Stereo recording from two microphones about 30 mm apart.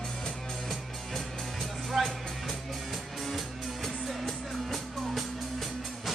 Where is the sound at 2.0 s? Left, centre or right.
Centre.